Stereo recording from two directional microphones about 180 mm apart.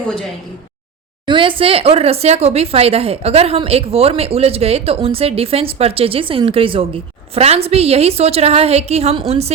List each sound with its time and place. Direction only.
0.1 s speech: centre (ahead or behind)
1.3 s speech: 30° right (ahead or behind)